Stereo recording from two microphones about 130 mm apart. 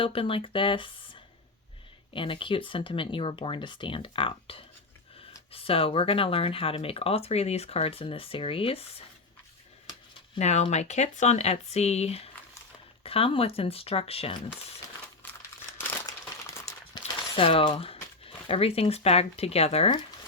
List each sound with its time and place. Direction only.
0.0 s speech: 45° left (ahead or behind)
2.1 s speech: 40° left (ahead or behind)
10.3 s speech: 60° left (ahead or behind)
15.2 s crumpling: 15° left (ahead or behind)
17.3 s speech: 45° left (ahead or behind)